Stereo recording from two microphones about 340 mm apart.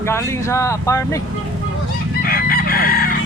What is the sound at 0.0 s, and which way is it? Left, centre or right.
Speech, centre.